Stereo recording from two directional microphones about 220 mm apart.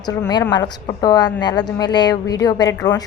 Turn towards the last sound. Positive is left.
turn(degrees=15)  # may be behind; listen again after turning